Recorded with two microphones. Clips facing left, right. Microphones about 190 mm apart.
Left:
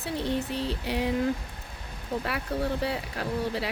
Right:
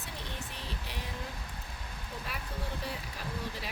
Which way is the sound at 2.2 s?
70° left (ahead or behind).